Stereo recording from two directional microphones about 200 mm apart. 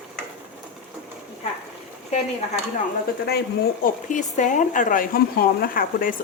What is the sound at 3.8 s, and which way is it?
Speech, 40° left (ahead or behind).